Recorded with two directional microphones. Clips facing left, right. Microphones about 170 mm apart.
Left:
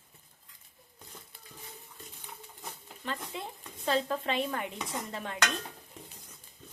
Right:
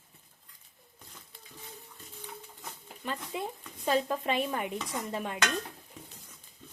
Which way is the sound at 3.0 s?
15° right (ahead or behind).